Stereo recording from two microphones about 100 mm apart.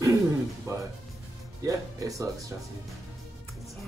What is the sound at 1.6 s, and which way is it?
Speech, 35° right (ahead or behind).